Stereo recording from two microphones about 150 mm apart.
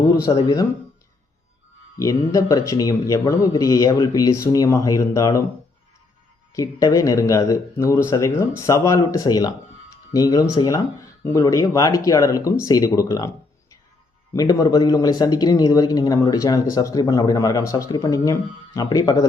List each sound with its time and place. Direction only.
0.4 s speech: 25° left (ahead or behind)
2.0 s speech: 20° left (ahead or behind)
6.5 s speech: 25° left (ahead or behind)